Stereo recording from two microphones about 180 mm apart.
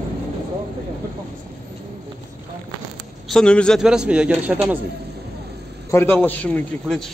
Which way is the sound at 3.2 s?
5° left (ahead or behind).